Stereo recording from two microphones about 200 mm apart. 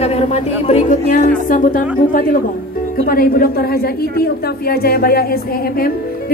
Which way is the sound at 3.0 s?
45° left (ahead or behind).